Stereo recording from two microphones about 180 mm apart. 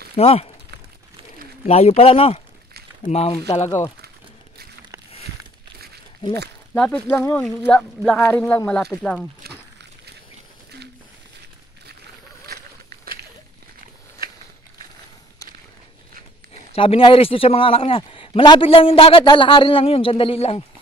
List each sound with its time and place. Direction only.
0.1 s speech: 35° left (ahead or behind)
1.7 s a man's voice: 35° left (ahead or behind)
3.4 s speech: 15° left (ahead or behind)
6.7 s speech: 10° left (ahead or behind)
16.7 s a man's voice: 30° left (ahead or behind)